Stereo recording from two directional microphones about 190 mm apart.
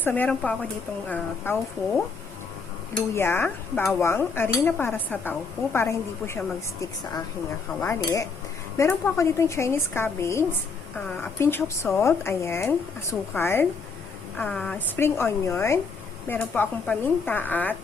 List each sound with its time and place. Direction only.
0.0 s speech: 10° left (ahead or behind)
3.2 s speech: 10° left (ahead or behind)
7.8 s speech: 15° left (ahead or behind)